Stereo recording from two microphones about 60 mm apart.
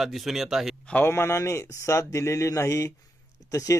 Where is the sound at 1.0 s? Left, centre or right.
Left.